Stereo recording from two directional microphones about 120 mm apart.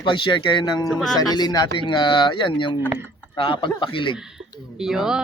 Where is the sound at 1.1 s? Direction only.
35° left (ahead or behind).